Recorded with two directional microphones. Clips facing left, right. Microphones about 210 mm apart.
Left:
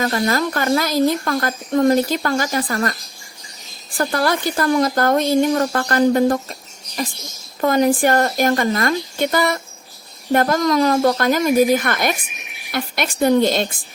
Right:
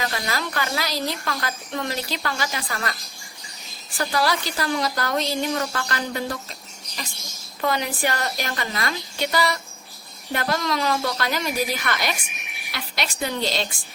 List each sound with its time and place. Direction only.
0.0 s a woman's voice: 45° left (ahead or behind)
3.9 s a woman's voice: 50° left (ahead or behind)